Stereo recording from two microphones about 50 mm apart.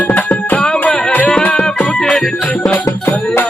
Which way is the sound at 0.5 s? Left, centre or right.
Centre.